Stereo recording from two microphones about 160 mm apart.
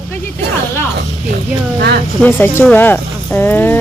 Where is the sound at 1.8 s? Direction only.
90° right.